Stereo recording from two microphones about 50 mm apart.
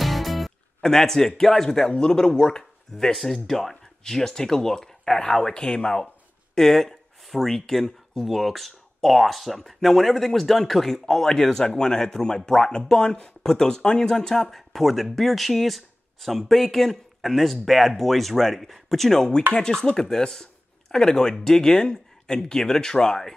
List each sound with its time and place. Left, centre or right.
0.0 s music: centre
0.7 s a man's voice: centre
6.5 s a man's voice: centre